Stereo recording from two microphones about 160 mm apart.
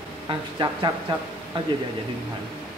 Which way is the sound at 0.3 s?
30° right (ahead or behind).